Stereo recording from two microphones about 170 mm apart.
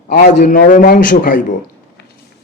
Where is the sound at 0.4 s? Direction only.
70° left (ahead or behind).